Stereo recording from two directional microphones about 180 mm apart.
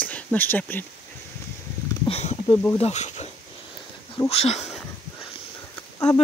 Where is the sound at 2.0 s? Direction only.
35° left (ahead or behind).